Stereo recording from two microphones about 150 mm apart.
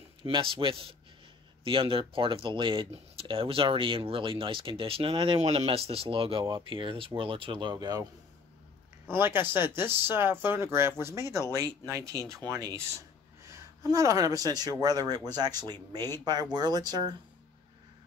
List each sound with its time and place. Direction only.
0.2 s speech: 35° right (ahead or behind)
9.1 s speech: 15° right (ahead or behind)
13.8 s speech: 25° right (ahead or behind)